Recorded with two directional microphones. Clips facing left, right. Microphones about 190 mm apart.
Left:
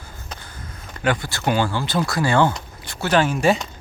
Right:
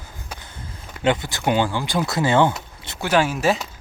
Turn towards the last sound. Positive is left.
turn(degrees=0)  # may be behind; listen again after turning